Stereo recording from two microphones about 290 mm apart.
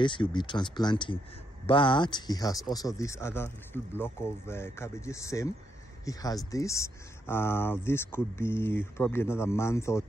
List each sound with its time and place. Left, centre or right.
0.0 s speech: centre